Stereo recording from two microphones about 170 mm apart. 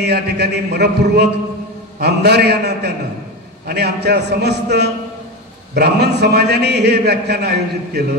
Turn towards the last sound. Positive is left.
turn(degrees=-75)  # may be behind; listen again after turning